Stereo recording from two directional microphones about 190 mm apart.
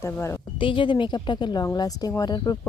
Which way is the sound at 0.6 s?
25° left (ahead or behind).